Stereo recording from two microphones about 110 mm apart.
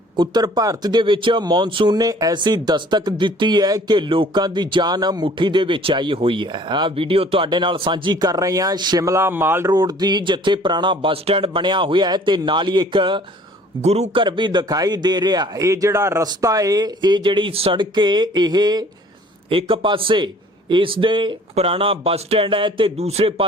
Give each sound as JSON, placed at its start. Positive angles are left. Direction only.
{"t": 0.2, "sound": "speech", "side_deg": -40}
{"t": 9.7, "sound": "speech", "side_deg": -40}
{"t": 13.8, "sound": "speech", "side_deg": -75}
{"t": 14.2, "sound": "speech", "side_deg": -45}
{"t": 19.5, "sound": "speech", "side_deg": -55}
{"t": 21.5, "sound": "a man's voice", "side_deg": -60}
{"t": 23.0, "sound": "speech", "side_deg": -70}